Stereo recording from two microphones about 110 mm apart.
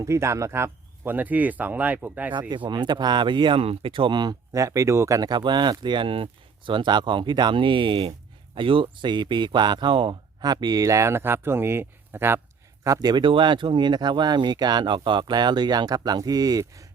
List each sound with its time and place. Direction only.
0.0 s speech: 25° right (ahead or behind)
2.5 s speech: 40° right (ahead or behind); by 12.4 s 20° right (ahead or behind)
12.8 s speech: 35° right (ahead or behind)